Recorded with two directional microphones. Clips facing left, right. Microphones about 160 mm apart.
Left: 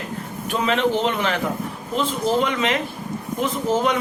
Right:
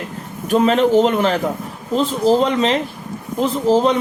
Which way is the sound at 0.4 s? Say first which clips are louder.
Right 7 dB; 40° right (ahead or behind).